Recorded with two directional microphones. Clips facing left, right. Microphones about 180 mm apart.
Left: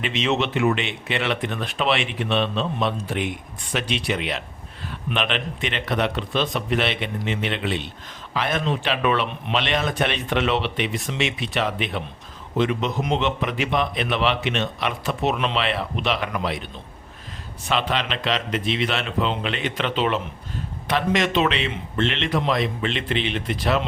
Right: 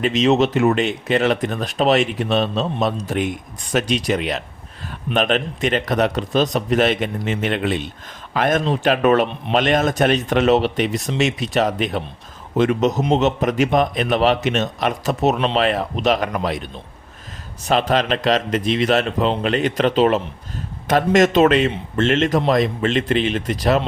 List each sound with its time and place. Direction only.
0.0 s a man's voice: 40° right (ahead or behind)